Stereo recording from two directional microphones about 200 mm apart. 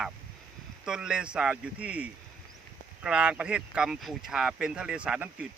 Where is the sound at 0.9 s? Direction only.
5° right (ahead or behind).